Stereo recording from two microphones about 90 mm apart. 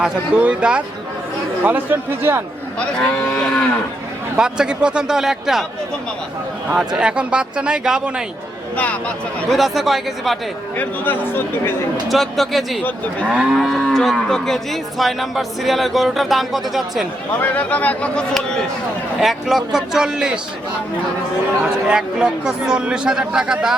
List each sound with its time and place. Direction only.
0.0 s speech: 10° right (ahead or behind)
2.7 s speech: 10° left (ahead or behind)
4.4 s speech: 10° right (ahead or behind)
6.7 s speech: 10° right (ahead or behind)
8.7 s speech: 15° left (ahead or behind)
9.5 s livestock: centre (ahead or behind)
10.8 s speech: 20° left (ahead or behind)
12.0 s livestock: centre (ahead or behind)
13.3 s speech: 10° right (ahead or behind)
13.6 s livestock: 5° left (ahead or behind)
17.4 s speech: 15° left (ahead or behind)
19.2 s livestock: 5° right (ahead or behind)
21.6 s speech: 10° right (ahead or behind)